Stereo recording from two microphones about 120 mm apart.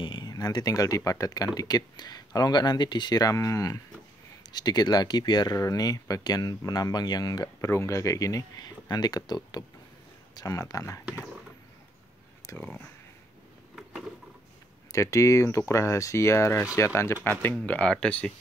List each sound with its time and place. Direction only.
0.0 s speech: 35° left (ahead or behind)
12.5 s speech: 15° left (ahead or behind)
14.9 s speech: 25° left (ahead or behind); by 18.3 s 10° left (ahead or behind)